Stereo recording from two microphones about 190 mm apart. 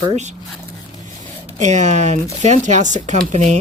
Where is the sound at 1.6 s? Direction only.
40° right (ahead or behind).